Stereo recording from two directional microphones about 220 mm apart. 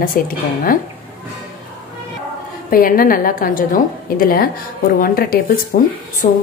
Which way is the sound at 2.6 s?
40° left (ahead or behind).